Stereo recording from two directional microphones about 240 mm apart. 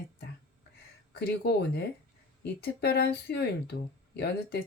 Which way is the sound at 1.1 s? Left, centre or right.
Left.